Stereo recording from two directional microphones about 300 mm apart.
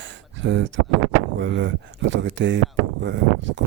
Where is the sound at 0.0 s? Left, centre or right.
Right.